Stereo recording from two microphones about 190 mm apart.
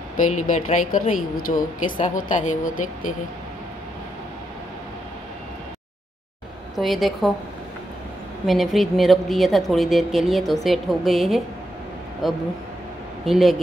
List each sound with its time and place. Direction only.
0.2 s a woman's voice: 40° left (ahead or behind)
6.7 s a woman's voice: centre (ahead or behind)
8.5 s a woman's voice: centre (ahead or behind)